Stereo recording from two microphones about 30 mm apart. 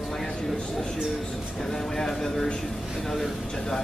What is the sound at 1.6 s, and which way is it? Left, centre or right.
Speech, centre.